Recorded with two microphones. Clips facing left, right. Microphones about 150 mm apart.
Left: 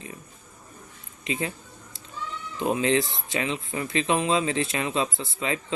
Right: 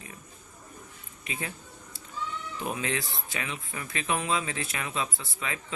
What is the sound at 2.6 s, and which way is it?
Speech, 25° left (ahead or behind).